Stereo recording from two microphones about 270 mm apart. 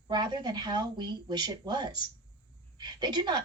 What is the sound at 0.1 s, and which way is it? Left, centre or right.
A woman's voice, centre.